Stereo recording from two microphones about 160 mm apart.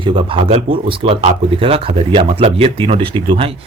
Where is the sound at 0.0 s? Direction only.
30° right (ahead or behind).